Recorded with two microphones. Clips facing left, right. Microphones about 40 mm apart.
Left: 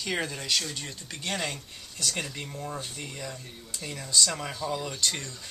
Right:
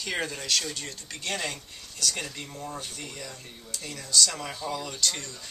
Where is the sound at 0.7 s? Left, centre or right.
Centre.